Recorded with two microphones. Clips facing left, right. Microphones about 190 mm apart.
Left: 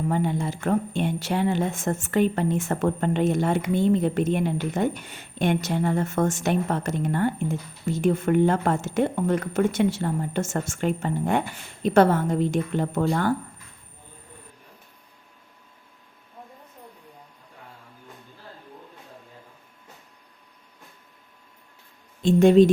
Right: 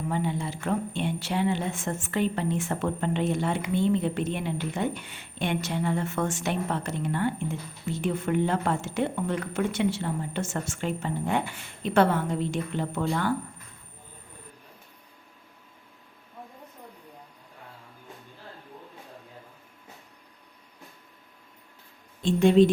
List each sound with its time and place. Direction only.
0.1 s speech: 45° left (ahead or behind)
22.3 s speech: 45° left (ahead or behind)